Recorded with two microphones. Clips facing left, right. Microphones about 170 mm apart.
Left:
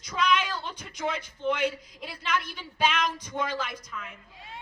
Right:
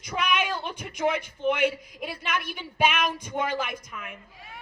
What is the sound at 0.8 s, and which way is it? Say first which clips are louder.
A man's voice: right 7 dB; 15° right (ahead or behind).